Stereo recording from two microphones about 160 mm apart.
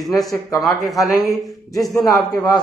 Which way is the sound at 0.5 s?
Centre (ahead or behind).